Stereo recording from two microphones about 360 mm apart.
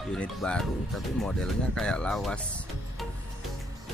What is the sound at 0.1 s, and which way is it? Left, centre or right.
Speech, centre.